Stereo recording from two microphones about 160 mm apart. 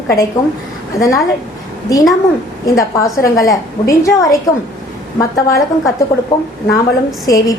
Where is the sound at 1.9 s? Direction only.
20° left (ahead or behind).